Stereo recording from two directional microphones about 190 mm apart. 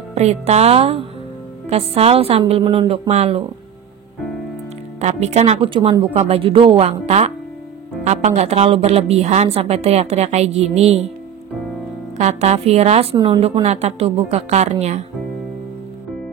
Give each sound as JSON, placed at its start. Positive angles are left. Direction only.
{"t": 0.1, "sound": "a woman's voice", "side_deg": -35}
{"t": 5.0, "sound": "a woman's voice", "side_deg": -35}
{"t": 12.2, "sound": "a woman's voice", "side_deg": -35}